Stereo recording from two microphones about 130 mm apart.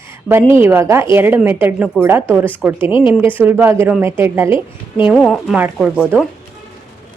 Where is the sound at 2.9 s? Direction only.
40° left (ahead or behind).